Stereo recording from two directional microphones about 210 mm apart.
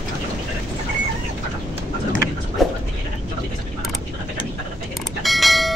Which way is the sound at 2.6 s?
Centre (ahead or behind).